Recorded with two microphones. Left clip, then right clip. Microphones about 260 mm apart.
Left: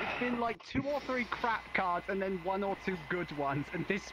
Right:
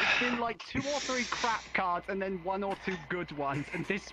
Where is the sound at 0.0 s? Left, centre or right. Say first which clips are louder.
Right 7 dB; right.